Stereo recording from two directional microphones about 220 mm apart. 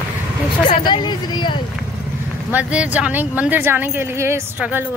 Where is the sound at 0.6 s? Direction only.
20° left (ahead or behind).